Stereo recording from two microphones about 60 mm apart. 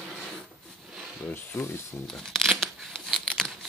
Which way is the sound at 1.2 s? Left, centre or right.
Left.